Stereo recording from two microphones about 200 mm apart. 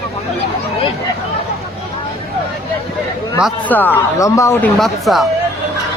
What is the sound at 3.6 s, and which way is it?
Speech, 10° left (ahead or behind).